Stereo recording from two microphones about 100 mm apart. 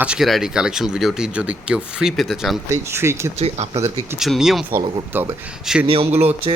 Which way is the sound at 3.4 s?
90° right.